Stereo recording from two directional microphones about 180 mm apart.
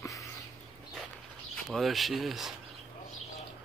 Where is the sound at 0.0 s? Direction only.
20° left (ahead or behind).